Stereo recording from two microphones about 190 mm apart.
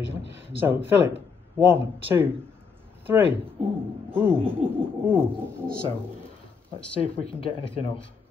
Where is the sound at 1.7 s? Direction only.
10° right (ahead or behind).